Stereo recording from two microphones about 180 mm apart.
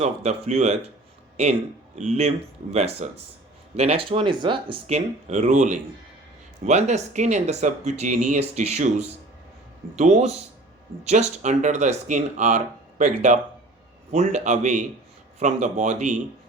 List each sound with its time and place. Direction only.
0.0 s speech: 35° right (ahead or behind)
2.0 s speech: 40° right (ahead or behind)